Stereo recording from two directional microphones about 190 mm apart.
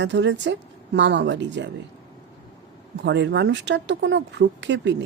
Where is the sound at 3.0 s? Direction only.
65° right (ahead or behind).